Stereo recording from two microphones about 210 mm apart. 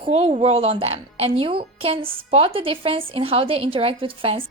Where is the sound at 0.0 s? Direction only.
30° right (ahead or behind).